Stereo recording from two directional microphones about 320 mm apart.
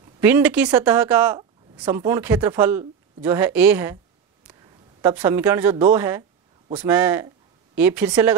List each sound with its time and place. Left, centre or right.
0.2 s speech: centre
5.0 s speech: centre